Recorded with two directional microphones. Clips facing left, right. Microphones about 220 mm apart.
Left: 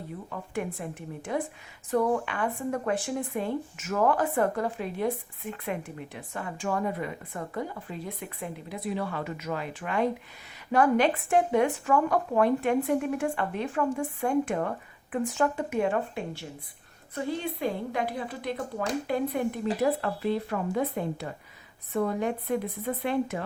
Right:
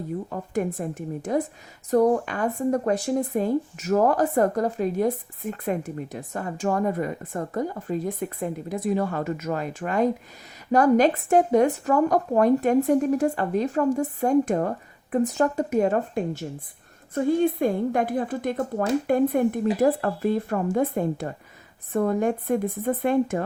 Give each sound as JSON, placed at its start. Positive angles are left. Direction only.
{"t": 0.3, "sound": "speech", "side_deg": -40}